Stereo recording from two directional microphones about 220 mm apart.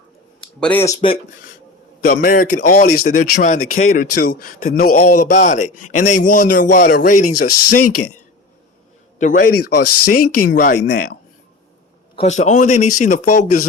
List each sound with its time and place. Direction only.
0.6 s speech: 10° left (ahead or behind)
2.0 s a man's voice: 40° left (ahead or behind)
4.1 s a man's voice: 50° left (ahead or behind)
7.3 s speech: 90° left
9.1 s a man's voice: 35° left (ahead or behind)
9.8 s speech: 90° left
10.4 s a man's voice: 40° left (ahead or behind)
12.1 s a man's voice: 30° left (ahead or behind)